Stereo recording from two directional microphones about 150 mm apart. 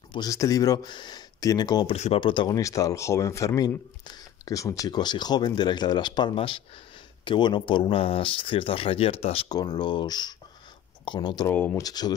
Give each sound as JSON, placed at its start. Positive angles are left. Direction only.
{"t": 0.1, "sound": "speech", "side_deg": 25}
{"t": 9.5, "sound": "speech", "side_deg": 25}
{"t": 11.4, "sound": "speech", "side_deg": 15}
{"t": 11.8, "sound": "speech", "side_deg": 25}